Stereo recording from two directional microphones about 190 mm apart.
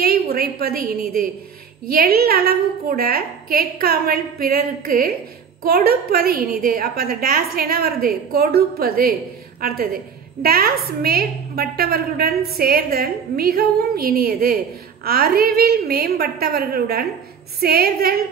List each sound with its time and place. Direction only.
0.0 s a woman's voice: 55° right (ahead or behind)